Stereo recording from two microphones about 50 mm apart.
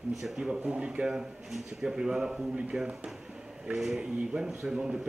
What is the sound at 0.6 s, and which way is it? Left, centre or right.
Speech, right.